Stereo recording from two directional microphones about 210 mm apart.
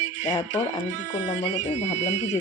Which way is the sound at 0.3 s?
10° left (ahead or behind).